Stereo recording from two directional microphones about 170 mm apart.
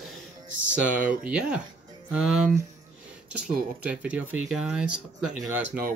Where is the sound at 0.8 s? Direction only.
10° right (ahead or behind).